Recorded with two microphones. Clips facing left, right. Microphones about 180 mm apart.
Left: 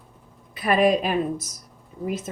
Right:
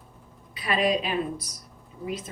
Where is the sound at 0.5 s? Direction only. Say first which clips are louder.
Left 5 dB; 50° left (ahead or behind).